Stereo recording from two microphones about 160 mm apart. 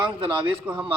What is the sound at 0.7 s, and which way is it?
Speech, 10° right (ahead or behind).